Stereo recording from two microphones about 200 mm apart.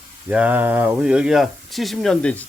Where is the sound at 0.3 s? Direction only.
5° right (ahead or behind).